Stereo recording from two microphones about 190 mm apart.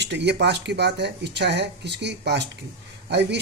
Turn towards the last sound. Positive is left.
turn(degrees=-60)  # may be behind; listen again after turning